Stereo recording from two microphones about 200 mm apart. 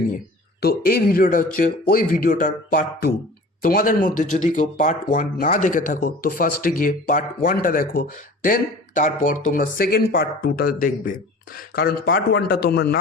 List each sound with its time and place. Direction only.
0.6 s speech: 50° left (ahead or behind)